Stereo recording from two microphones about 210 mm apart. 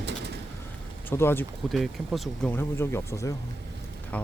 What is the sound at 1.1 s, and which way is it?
Speech, 10° left (ahead or behind).